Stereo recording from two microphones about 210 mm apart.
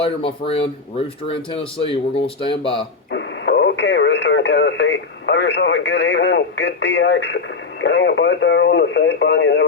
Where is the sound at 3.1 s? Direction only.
60° left (ahead or behind).